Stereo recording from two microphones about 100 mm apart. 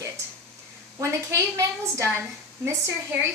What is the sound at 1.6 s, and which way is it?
Speech, 30° right (ahead or behind).